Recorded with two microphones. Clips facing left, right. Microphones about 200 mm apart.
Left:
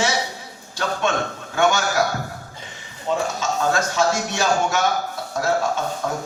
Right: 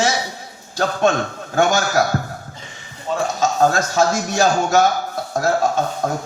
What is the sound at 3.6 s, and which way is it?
Speech, 40° right (ahead or behind).